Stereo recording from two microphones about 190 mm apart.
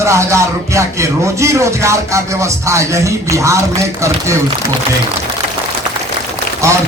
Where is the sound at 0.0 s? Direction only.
15° right (ahead or behind).